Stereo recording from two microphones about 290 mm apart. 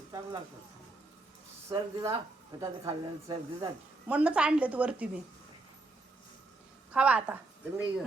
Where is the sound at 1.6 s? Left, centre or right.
Centre.